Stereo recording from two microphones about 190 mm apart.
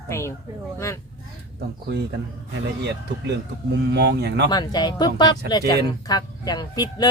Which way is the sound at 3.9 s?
65° right (ahead or behind).